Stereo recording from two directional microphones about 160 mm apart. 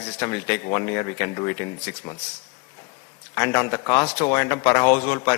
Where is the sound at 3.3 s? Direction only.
15° left (ahead or behind).